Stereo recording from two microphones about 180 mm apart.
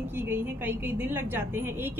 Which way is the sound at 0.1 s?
10° right (ahead or behind).